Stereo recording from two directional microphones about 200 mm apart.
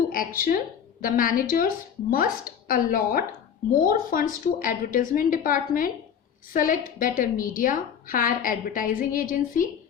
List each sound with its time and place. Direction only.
0.1 s a woman's voice: 45° left (ahead or behind)